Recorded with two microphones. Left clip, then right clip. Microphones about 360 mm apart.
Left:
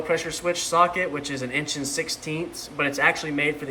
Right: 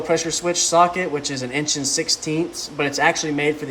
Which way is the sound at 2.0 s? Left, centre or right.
Centre.